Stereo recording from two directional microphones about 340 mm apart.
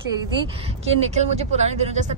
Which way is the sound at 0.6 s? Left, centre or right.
Centre.